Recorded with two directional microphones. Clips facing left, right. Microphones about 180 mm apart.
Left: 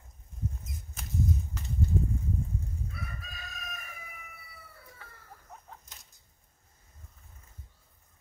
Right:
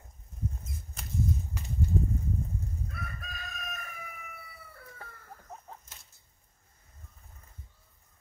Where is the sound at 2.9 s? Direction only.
55° right (ahead or behind).